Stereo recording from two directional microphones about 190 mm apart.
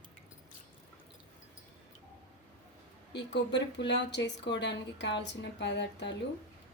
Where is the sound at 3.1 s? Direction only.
65° left (ahead or behind).